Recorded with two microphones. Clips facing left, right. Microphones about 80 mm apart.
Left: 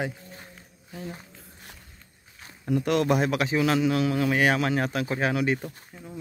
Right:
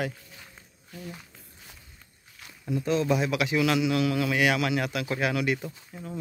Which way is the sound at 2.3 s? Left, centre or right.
Left.